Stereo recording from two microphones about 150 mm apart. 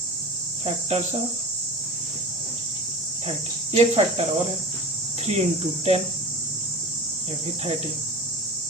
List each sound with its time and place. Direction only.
0.6 s cricket: 45° right (ahead or behind)
3.7 s speech: 40° right (ahead or behind)